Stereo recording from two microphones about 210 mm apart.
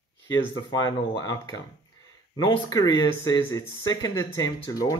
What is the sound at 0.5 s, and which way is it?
A man's voice, 15° left (ahead or behind).